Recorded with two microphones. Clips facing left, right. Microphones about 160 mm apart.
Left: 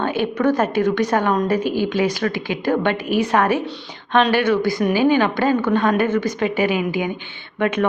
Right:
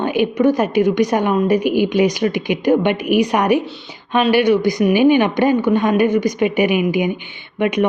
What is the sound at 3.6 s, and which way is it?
A woman's voice, 5° right (ahead or behind).